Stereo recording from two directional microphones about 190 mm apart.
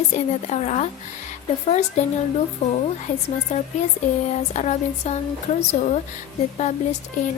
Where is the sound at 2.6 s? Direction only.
35° left (ahead or behind).